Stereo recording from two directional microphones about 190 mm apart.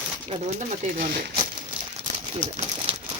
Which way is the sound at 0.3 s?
40° right (ahead or behind).